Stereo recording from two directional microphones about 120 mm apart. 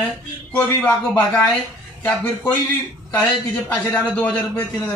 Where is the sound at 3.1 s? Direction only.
10° left (ahead or behind).